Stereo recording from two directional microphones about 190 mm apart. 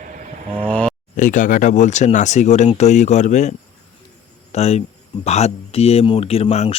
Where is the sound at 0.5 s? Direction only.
5° left (ahead or behind).